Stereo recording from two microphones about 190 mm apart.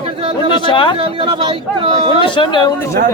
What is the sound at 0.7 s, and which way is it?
Speech, 25° left (ahead or behind).